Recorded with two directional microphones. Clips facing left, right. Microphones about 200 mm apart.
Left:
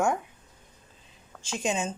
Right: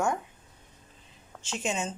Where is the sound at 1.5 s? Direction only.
15° left (ahead or behind).